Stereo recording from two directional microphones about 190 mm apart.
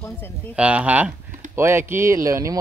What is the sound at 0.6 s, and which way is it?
Speech, 5° right (ahead or behind).